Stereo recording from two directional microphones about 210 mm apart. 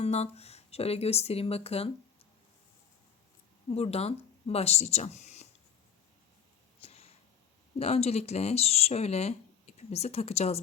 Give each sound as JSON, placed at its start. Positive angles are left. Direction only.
{"t": 0.0, "sound": "speech", "side_deg": 30}
{"t": 3.8, "sound": "speech", "side_deg": 30}
{"t": 6.8, "sound": "a sound", "side_deg": 30}
{"t": 7.8, "sound": "speech", "side_deg": 30}